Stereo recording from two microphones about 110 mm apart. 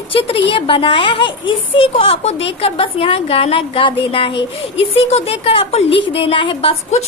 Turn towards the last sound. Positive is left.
turn(degrees=60)  # may be behind; listen again after turning